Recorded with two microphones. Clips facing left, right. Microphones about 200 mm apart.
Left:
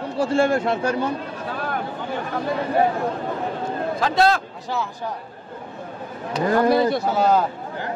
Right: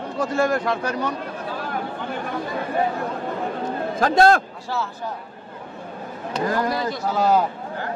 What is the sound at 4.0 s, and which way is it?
Speech, 50° right (ahead or behind).